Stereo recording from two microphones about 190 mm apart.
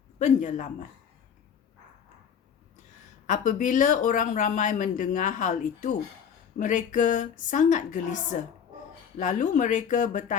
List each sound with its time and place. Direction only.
0.2 s a woman's voice: 40° left (ahead or behind)
3.2 s a woman's voice: 40° left (ahead or behind)